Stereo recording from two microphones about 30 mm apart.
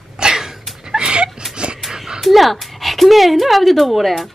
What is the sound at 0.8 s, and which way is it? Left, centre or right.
Music, right.